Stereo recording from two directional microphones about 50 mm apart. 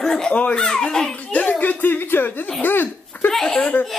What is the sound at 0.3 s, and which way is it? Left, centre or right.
Speech, left.